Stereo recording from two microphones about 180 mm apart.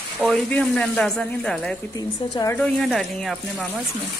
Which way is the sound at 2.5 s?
Centre (ahead or behind).